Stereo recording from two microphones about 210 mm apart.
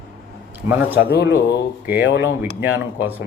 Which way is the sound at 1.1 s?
60° left (ahead or behind).